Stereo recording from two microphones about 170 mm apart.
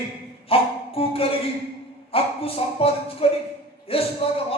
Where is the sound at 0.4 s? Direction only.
35° left (ahead or behind).